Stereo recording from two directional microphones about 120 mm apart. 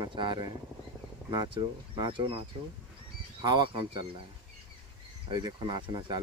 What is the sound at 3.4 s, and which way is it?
Speech, 40° right (ahead or behind).